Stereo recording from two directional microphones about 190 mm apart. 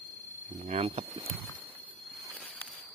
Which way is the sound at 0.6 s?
30° right (ahead or behind).